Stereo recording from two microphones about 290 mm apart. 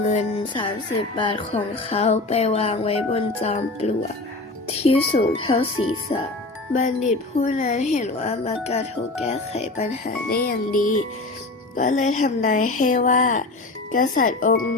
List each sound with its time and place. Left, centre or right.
0.0 s speech: left
6.7 s speech: left